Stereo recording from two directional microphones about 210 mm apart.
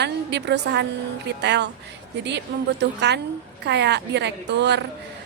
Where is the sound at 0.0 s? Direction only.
55° right (ahead or behind).